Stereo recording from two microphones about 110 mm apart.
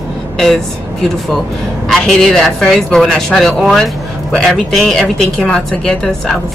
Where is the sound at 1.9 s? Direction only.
5° left (ahead or behind).